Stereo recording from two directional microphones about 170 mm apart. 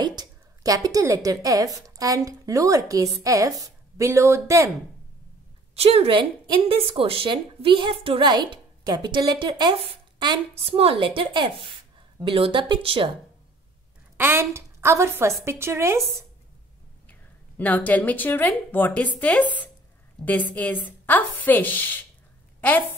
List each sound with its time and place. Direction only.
0.0 s a woman's voice: 25° right (ahead or behind)
5.8 s a woman's voice: 35° right (ahead or behind)
14.1 s a woman's voice: 15° right (ahead or behind)
17.1 s a woman's voice: 10° left (ahead or behind)